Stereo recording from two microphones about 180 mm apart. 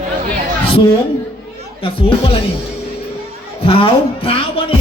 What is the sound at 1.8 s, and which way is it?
Speech, 30° left (ahead or behind).